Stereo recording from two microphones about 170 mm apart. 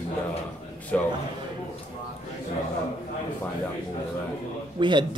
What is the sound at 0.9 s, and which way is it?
Speech, 10° left (ahead or behind).